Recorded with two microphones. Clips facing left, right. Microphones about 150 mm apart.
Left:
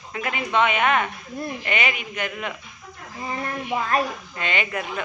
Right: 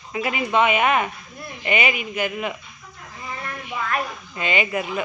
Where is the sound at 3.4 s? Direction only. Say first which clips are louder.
Left 3 dB; 35° left (ahead or behind).